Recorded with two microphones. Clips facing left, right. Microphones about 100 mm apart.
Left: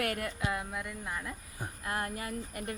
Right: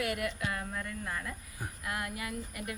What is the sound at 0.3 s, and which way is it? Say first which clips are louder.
Speech: left 1 dB; 20° left (ahead or behind).